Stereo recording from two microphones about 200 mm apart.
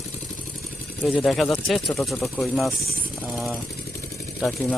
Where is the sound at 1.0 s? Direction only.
Centre (ahead or behind).